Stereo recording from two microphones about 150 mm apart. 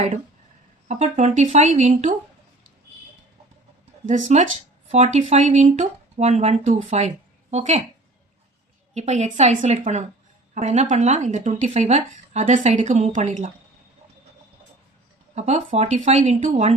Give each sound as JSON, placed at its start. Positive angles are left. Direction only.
{"t": 0.9, "sound": "speech", "side_deg": -50}
{"t": 4.0, "sound": "speech", "side_deg": -55}
{"t": 9.0, "sound": "speech", "side_deg": -50}
{"t": 15.4, "sound": "speech", "side_deg": -50}